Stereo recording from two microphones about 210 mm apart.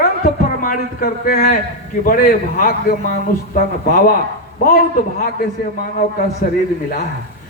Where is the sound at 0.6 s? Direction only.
40° left (ahead or behind).